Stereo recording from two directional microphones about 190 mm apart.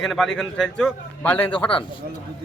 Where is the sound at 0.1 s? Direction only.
Centre (ahead or behind).